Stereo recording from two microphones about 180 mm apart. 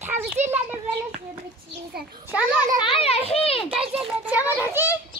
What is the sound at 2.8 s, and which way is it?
Speech, 30° left (ahead or behind).